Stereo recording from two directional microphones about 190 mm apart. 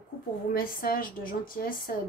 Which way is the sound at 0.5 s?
50° left (ahead or behind).